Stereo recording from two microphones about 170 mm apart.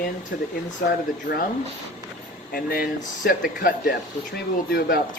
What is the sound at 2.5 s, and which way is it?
Speech, 60° left (ahead or behind).